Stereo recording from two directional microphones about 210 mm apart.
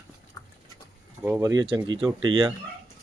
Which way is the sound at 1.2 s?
15° right (ahead or behind).